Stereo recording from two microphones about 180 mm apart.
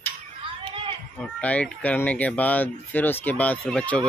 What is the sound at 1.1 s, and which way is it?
Speech, 10° left (ahead or behind).